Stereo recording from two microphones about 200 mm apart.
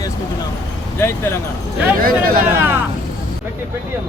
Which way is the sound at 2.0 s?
45° right (ahead or behind).